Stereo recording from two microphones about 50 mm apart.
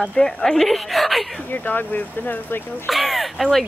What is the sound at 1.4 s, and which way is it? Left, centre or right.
Speech, left.